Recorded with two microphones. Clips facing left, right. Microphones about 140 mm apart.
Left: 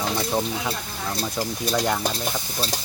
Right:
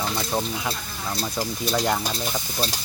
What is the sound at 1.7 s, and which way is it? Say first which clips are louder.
Stir: left 1 dB; centre (ahead or behind).